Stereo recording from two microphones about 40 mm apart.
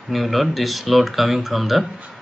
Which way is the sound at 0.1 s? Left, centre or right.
Centre.